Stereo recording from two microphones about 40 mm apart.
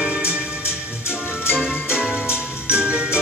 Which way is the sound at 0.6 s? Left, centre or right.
Left.